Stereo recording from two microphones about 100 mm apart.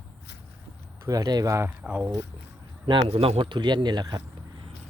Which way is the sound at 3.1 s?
70° right (ahead or behind).